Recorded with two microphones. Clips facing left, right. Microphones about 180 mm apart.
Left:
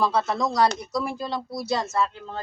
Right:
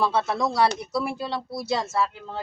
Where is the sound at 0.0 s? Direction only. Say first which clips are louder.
Even; 5° right (ahead or behind).